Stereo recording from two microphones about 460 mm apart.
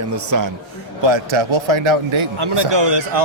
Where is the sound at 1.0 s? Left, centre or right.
Right.